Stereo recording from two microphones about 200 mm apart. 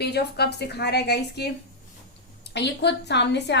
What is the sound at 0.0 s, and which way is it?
A woman's voice, 55° left (ahead or behind).